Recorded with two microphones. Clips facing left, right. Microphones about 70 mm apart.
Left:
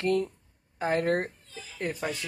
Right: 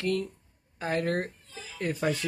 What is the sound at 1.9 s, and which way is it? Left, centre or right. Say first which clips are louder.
Speech: right 9 dB; centre.